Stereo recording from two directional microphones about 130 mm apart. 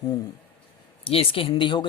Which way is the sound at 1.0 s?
45° left (ahead or behind).